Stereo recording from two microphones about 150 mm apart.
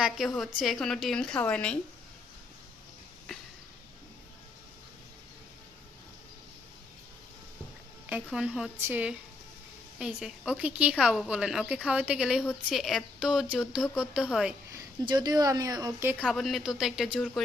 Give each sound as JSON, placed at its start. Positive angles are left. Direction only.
{"t": 0.0, "sound": "a woman's voice", "side_deg": 0}
{"t": 8.1, "sound": "a woman's voice", "side_deg": -5}
{"t": 14.7, "sound": "speech", "side_deg": -25}